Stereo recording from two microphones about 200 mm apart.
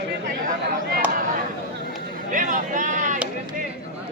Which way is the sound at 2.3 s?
40° right (ahead or behind).